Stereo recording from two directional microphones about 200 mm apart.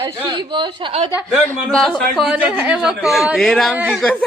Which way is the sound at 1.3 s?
Centre (ahead or behind).